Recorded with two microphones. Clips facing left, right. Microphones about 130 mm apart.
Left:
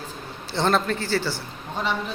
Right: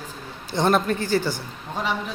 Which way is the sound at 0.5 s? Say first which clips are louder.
Right 2 dB; 15° right (ahead or behind).